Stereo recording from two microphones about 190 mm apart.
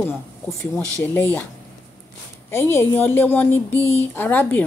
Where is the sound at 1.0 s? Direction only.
10° left (ahead or behind).